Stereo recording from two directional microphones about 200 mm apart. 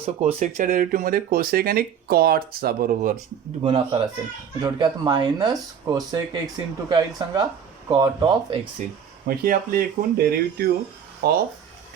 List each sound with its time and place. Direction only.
0.0 s speech: 30° right (ahead or behind); by 3.2 s 45° right (ahead or behind)
3.6 s speech: 25° right (ahead or behind)
8.8 s speech: 35° right (ahead or behind)
9.2 s speech: 45° right (ahead or behind)